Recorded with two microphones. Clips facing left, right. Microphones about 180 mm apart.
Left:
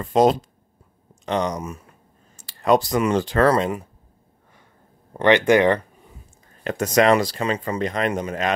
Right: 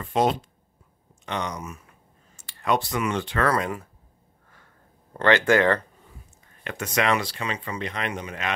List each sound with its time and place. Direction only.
0.0 s speech: 40° left (ahead or behind); by 3.9 s 20° left (ahead or behind)
5.1 s speech: 20° left (ahead or behind)
6.6 s speech: 40° left (ahead or behind)